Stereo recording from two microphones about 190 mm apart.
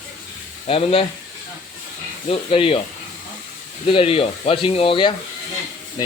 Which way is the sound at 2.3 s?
30° left (ahead or behind).